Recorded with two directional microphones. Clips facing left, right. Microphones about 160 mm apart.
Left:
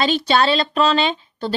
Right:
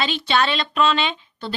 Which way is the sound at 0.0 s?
40° left (ahead or behind).